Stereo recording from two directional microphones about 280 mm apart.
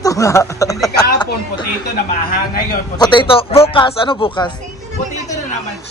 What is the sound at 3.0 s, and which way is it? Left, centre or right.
Speech, centre.